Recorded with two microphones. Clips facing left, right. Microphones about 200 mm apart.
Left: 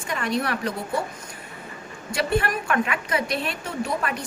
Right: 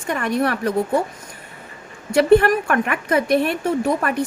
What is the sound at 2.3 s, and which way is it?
A woman's voice, 45° right (ahead or behind).